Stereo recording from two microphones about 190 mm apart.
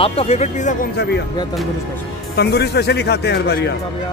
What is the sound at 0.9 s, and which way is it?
Speech, 60° left (ahead or behind).